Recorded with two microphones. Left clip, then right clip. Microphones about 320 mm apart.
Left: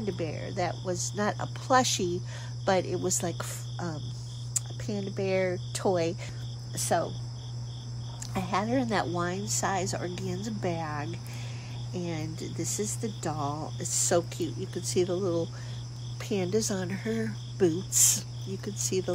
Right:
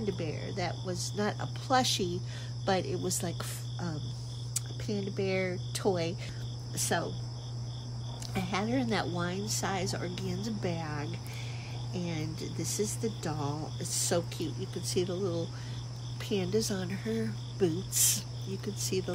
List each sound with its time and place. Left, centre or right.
0.0 s speech: centre
8.3 s speech: centre